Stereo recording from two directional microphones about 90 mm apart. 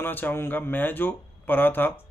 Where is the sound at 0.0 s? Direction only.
25° left (ahead or behind).